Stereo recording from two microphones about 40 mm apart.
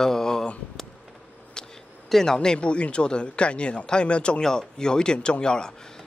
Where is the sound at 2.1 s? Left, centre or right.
Centre.